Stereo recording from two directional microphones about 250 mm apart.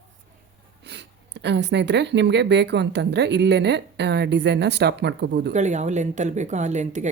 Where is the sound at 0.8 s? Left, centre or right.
Right.